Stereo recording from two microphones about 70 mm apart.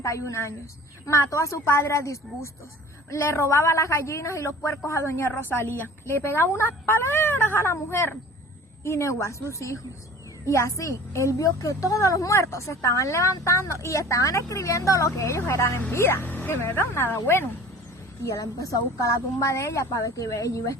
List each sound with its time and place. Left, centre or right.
0.0 s a woman's voice: left
5.3 s a woman's voice: left
18.3 s a woman's voice: left